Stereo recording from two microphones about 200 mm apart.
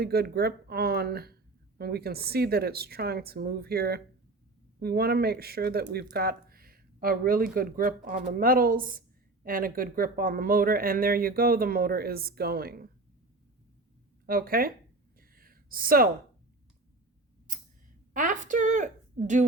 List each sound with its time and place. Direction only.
0.0 s speech: 50° right (ahead or behind)
14.3 s speech: 45° right (ahead or behind)
15.2 s a sound: 45° right (ahead or behind)
18.1 s speech: 40° right (ahead or behind)